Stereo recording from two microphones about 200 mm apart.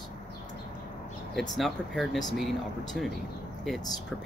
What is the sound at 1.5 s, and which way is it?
Speech, centre (ahead or behind).